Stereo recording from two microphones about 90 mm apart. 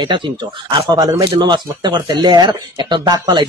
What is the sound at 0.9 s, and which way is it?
A man's voice, 45° right (ahead or behind).